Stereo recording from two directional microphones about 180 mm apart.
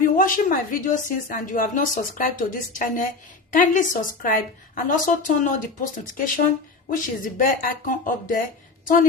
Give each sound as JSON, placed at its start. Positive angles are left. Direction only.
{"t": 0.2, "sound": "a woman's voice", "side_deg": 50}